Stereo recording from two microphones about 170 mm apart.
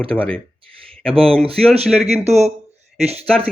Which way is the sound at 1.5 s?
35° right (ahead or behind).